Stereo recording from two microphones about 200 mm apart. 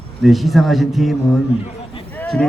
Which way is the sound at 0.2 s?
Centre (ahead or behind).